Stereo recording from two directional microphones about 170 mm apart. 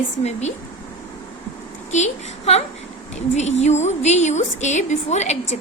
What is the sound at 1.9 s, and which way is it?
A woman's voice, 40° left (ahead or behind).